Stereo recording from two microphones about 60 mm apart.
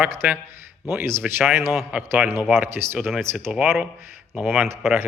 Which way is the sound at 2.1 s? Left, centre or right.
Right.